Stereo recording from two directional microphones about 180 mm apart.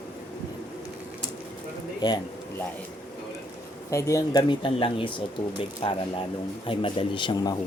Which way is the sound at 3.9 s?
15° left (ahead or behind).